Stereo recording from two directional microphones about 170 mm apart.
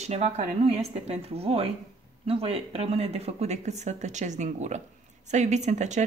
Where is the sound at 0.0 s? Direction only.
40° right (ahead or behind).